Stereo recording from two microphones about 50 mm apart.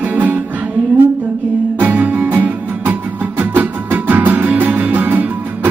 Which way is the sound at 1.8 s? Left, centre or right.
Right.